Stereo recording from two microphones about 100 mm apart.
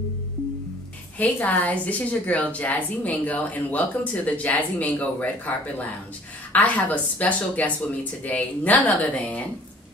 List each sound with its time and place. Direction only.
1.1 s a woman's voice: 15° left (ahead or behind)
6.5 s a woman's voice: 15° left (ahead or behind)